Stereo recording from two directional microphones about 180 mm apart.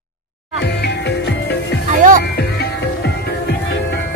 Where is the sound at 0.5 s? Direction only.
75° left (ahead or behind).